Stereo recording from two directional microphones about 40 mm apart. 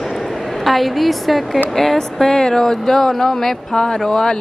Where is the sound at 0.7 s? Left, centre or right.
Centre.